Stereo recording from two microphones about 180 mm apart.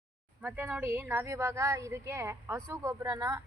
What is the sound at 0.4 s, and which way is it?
A woman's voice, 10° right (ahead or behind).